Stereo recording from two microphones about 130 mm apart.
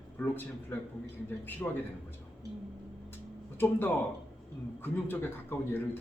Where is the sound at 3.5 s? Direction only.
15° left (ahead or behind).